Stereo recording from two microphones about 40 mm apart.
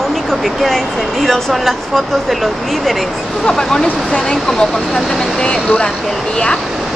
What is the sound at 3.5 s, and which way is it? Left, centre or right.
Speech, centre.